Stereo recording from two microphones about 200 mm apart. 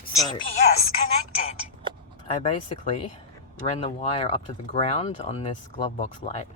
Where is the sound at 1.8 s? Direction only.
25° right (ahead or behind).